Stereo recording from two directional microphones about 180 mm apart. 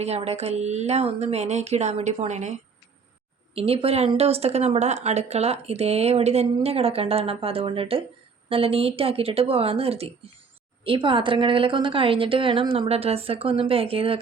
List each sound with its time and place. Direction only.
0.0 s a woman's voice: 35° right (ahead or behind)